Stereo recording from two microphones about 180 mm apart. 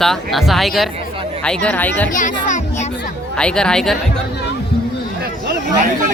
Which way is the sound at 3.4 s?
5° left (ahead or behind).